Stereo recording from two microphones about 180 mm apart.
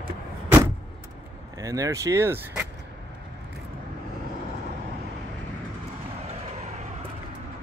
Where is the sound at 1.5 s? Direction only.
20° right (ahead or behind).